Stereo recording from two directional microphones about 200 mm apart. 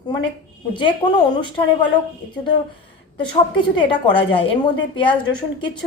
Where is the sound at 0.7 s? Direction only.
25° left (ahead or behind).